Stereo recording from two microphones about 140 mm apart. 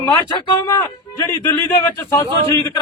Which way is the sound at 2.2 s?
20° left (ahead or behind).